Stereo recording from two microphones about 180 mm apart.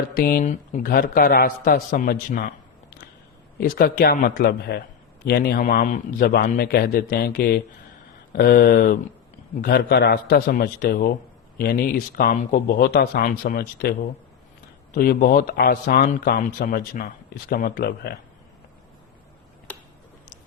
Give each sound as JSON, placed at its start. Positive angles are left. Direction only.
{"t": 0.2, "sound": "a man's voice", "side_deg": 50}
{"t": 3.6, "sound": "a man's voice", "side_deg": 55}
{"t": 9.6, "sound": "speech", "side_deg": 70}
{"t": 14.9, "sound": "a man's voice", "side_deg": 50}